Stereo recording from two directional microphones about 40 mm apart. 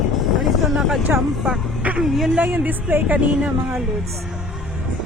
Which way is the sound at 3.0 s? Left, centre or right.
Right.